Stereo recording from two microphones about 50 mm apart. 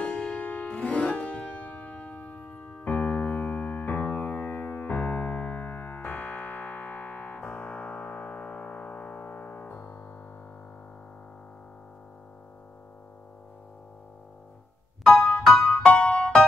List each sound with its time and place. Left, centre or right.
0.0 s music: left
1.7 s keyboard: left
7.3 s music: left
9.7 s music: left
15.0 s music: centre